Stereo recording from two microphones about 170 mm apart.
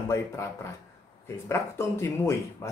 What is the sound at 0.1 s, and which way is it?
Speech, 15° left (ahead or behind).